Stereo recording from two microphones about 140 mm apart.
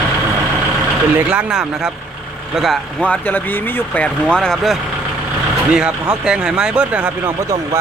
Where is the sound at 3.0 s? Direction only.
10° left (ahead or behind).